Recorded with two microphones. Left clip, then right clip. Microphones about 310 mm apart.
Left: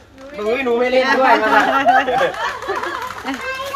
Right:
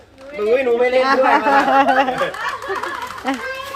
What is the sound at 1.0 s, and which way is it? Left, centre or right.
Speech, centre.